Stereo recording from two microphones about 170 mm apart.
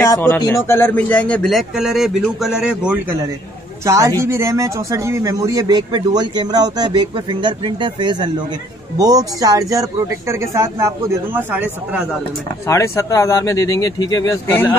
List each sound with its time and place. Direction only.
0.0 s speech: 15° left (ahead or behind); by 3.2 s 5° right (ahead or behind)
3.8 s speech: 20° right (ahead or behind)
12.6 s speech: 15° left (ahead or behind)